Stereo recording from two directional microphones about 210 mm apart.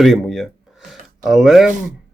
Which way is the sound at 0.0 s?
Centre (ahead or behind).